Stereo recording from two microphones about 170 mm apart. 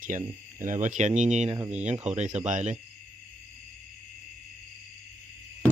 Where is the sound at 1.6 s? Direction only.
10° right (ahead or behind).